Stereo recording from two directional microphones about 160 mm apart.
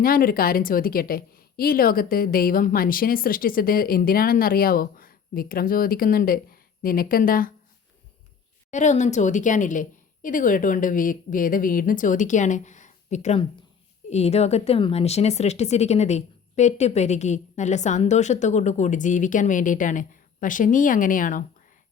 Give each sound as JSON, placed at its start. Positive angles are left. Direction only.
{"t": 0.0, "sound": "a woman's voice", "side_deg": 65}
{"t": 8.7, "sound": "a woman's voice", "side_deg": 50}